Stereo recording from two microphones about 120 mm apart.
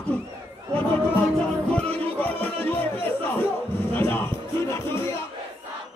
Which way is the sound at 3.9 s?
20° left (ahead or behind).